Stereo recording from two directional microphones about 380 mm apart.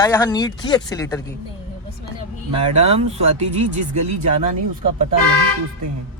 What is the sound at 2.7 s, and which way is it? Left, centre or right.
Speech, centre.